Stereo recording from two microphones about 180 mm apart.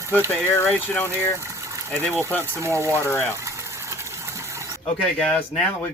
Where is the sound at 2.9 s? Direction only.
15° left (ahead or behind).